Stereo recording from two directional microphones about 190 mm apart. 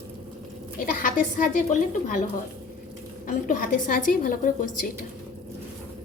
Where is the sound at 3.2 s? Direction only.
45° left (ahead or behind).